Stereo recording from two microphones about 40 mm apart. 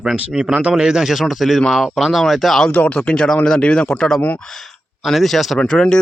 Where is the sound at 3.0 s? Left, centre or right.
Left.